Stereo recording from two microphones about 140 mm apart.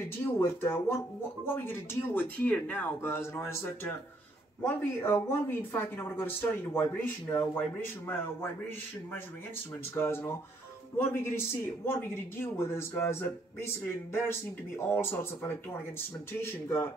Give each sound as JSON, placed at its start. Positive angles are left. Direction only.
{"t": 0.2, "sound": "speech", "side_deg": 15}
{"t": 9.9, "sound": "speech", "side_deg": 15}
{"t": 14.9, "sound": "speech", "side_deg": 15}